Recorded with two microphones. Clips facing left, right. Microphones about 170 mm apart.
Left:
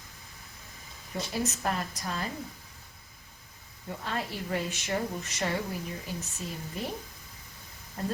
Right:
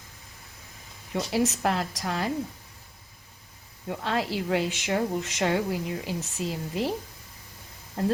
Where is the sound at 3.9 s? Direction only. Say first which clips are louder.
Right 6 dB; 80° right.